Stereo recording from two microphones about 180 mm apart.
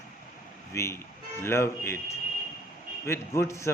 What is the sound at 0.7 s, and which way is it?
Speech, 15° left (ahead or behind).